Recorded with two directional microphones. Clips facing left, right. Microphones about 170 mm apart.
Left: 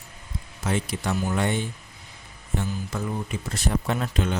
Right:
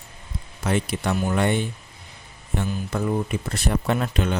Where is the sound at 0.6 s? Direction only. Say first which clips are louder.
Right 3 dB; 65° right (ahead or behind).